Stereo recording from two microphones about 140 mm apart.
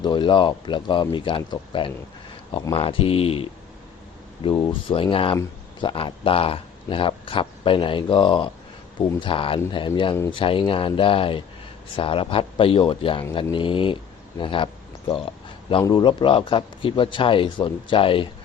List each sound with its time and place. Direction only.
0.0 s speech: 35° left (ahead or behind)